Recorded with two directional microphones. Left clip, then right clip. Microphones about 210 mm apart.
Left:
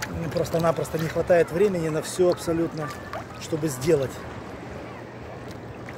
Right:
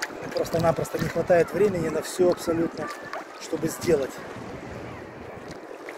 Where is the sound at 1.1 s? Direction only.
Centre (ahead or behind).